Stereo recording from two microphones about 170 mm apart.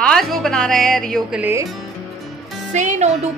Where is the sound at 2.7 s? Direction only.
45° right (ahead or behind).